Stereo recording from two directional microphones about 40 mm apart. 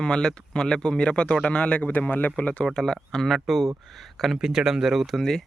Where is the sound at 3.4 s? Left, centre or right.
Centre.